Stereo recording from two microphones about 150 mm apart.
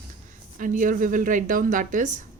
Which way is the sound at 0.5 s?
60° right (ahead or behind).